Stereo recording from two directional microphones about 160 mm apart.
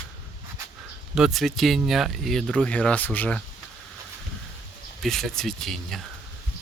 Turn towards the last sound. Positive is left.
turn(degrees=0)  # may be behind; listen again after turning